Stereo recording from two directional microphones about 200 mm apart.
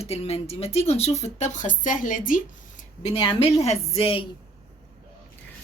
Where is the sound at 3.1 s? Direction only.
25° left (ahead or behind).